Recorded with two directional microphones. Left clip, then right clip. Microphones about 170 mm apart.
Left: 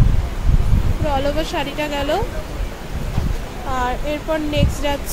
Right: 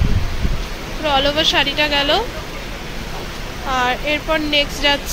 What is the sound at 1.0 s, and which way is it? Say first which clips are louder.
Speech: right 5 dB; 5° left (ahead or behind).